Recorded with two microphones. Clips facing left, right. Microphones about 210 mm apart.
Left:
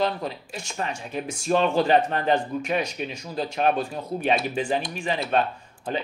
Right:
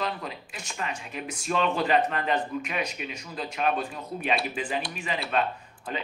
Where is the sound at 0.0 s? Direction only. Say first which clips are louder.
Left 6 dB; 35° left (ahead or behind).